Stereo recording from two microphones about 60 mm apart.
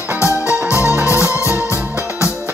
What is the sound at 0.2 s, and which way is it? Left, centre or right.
Music, left.